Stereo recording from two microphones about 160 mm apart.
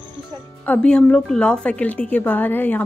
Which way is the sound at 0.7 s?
10° left (ahead or behind).